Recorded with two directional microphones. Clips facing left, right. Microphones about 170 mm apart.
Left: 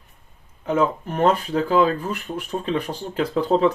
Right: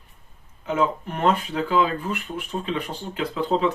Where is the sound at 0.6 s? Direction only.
40° left (ahead or behind).